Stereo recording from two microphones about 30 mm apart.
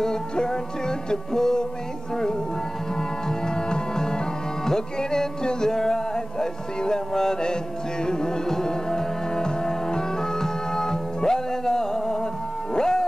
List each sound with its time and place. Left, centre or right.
0.0 s music: centre
3.0 s music: left